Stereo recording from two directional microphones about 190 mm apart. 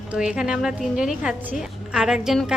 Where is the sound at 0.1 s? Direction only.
5° right (ahead or behind).